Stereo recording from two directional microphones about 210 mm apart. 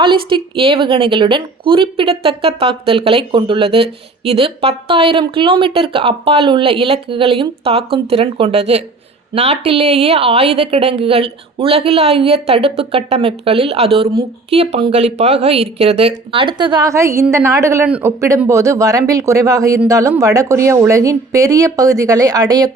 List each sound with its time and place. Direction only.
0.0 s a woman's voice: 25° right (ahead or behind)